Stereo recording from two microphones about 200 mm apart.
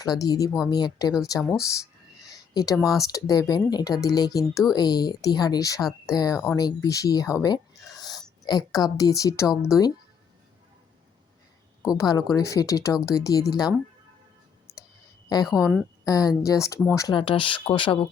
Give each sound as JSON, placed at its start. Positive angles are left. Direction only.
{"t": 0.0, "sound": "speech", "side_deg": 15}
{"t": 2.2, "sound": "a sound", "side_deg": 20}
{"t": 2.7, "sound": "a woman's voice", "side_deg": 0}
{"t": 3.0, "sound": "speech", "side_deg": 15}
{"t": 7.8, "sound": "a sound", "side_deg": 0}
{"t": 8.4, "sound": "speech", "side_deg": 20}
{"t": 11.9, "sound": "speech", "side_deg": 20}
{"t": 14.7, "sound": "clicking", "side_deg": 15}
{"t": 15.4, "sound": "a woman's voice", "side_deg": -5}
{"t": 16.0, "sound": "speech", "side_deg": 15}